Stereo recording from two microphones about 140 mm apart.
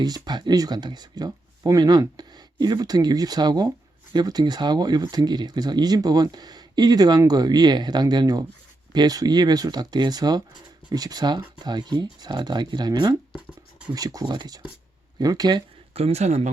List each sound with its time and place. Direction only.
0.0 s speech: 30° right (ahead or behind)
16.0 s speech: 50° right (ahead or behind)